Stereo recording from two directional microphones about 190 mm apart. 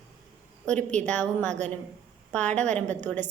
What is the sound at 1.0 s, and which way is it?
Speech, 10° left (ahead or behind).